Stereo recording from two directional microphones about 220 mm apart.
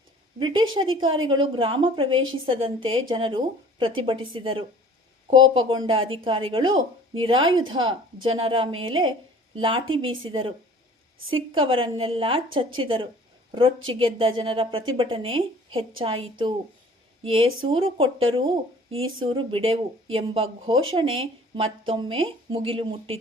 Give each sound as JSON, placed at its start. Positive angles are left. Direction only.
{"t": 0.3, "sound": "speech", "side_deg": -20}